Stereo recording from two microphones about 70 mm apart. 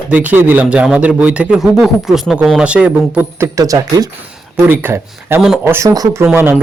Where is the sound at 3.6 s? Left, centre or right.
Right.